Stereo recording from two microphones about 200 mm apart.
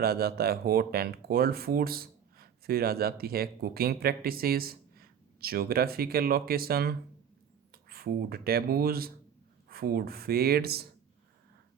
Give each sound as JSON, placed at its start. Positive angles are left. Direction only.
{"t": 0.0, "sound": "speech", "side_deg": -50}